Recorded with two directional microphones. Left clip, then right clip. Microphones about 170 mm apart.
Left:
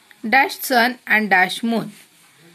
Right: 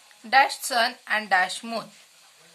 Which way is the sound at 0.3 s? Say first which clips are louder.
Left 4 dB; 30° left (ahead or behind).